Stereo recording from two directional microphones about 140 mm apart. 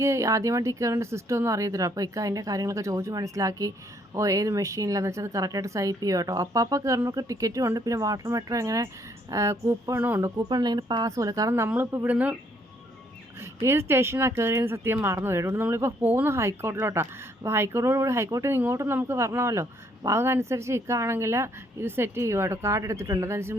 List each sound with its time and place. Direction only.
0.0 s speech: 20° right (ahead or behind)
13.4 s speech: 20° right (ahead or behind)